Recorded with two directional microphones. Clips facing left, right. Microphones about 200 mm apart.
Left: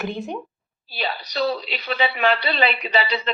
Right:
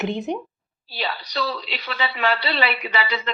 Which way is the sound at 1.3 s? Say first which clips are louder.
Left 4 dB; 20° left (ahead or behind).